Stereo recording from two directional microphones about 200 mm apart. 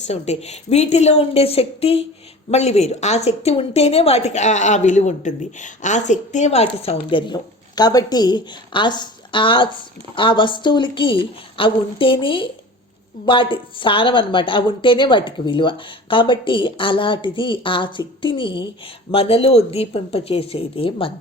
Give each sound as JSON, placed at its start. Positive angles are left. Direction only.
{"t": 0.1, "sound": "a woman's voice", "side_deg": 30}